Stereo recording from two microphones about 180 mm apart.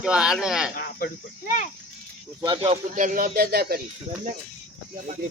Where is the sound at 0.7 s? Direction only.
50° left (ahead or behind).